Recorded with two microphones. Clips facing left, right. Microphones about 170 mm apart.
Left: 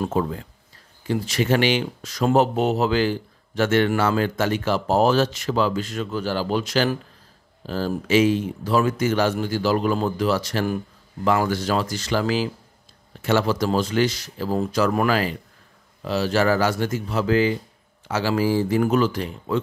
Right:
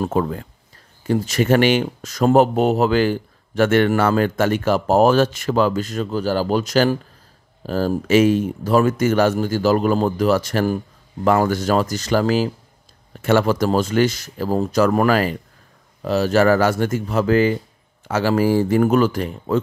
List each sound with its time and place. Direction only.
0.0 s speech: 55° right (ahead or behind)
1.0 s speech: 45° right (ahead or behind)